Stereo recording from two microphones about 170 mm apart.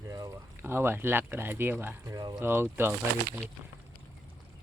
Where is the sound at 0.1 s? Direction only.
20° right (ahead or behind).